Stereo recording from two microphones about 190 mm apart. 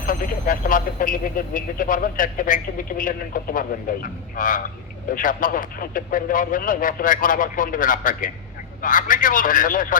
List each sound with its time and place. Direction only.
0.0 s speech: 45° left (ahead or behind)